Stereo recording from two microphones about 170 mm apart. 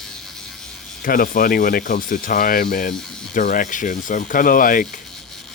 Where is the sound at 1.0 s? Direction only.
55° left (ahead or behind).